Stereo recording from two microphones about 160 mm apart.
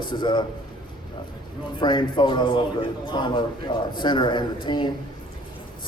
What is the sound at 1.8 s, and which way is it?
A man's voice, 30° left (ahead or behind).